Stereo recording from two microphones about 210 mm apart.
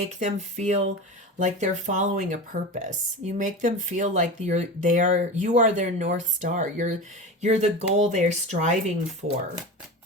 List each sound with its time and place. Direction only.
0.2 s speech: 35° right (ahead or behind)